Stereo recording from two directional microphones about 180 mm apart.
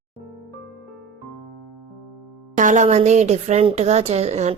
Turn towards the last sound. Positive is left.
turn(degrees=-35)  # may be behind; listen again after turning